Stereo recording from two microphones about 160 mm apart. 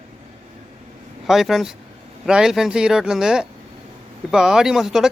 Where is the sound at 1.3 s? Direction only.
Centre (ahead or behind).